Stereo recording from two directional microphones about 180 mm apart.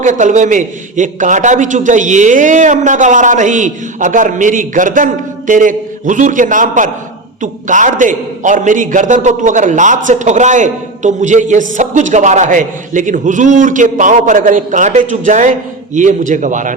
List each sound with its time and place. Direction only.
0.0 s a man's voice: 45° right (ahead or behind)